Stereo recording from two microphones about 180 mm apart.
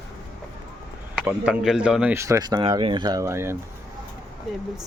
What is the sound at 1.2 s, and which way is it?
Speech, 5° right (ahead or behind).